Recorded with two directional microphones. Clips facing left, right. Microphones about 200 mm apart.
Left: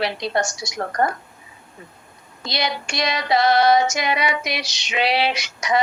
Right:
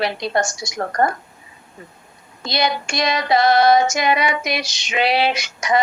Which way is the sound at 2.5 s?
50° right (ahead or behind).